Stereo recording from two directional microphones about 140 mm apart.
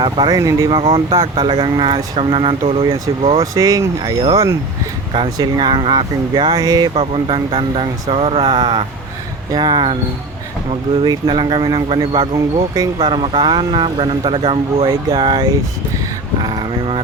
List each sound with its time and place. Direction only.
0.0 s speech: 30° right (ahead or behind)
0.7 s speech: 40° right (ahead or behind)
3.4 s speech: 25° right (ahead or behind)
5.1 s speech: 35° right (ahead or behind)
6.9 s speech: 40° right (ahead or behind)
11.0 s speech: 30° right (ahead or behind)
16.4 s vehicle: 30° right (ahead or behind)